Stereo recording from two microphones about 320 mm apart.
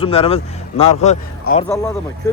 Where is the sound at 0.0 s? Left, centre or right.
Centre.